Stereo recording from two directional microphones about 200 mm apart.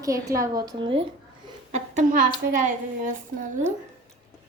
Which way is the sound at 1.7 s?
40° right (ahead or behind).